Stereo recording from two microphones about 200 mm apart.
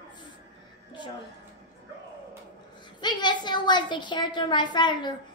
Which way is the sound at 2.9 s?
20° left (ahead or behind).